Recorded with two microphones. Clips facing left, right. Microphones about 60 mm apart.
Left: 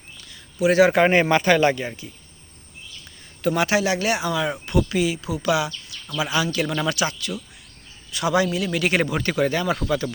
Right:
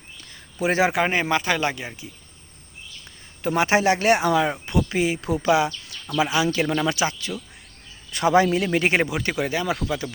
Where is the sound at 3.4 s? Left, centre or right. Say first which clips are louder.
Right 1 dB; right.